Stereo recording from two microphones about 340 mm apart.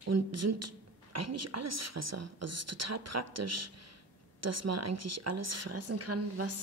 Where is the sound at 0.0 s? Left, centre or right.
Right.